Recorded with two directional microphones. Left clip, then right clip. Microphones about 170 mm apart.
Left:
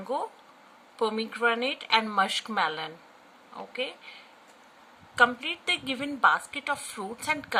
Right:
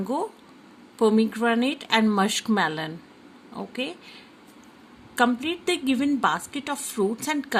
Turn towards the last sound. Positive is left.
turn(degrees=-15)  # may be behind; listen again after turning